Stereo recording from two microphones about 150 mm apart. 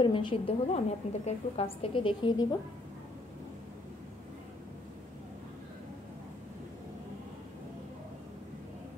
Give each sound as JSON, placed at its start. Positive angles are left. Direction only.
{"t": 0.0, "sound": "a woman's voice", "side_deg": 35}